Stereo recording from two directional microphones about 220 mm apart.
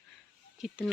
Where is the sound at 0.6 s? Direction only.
5° right (ahead or behind).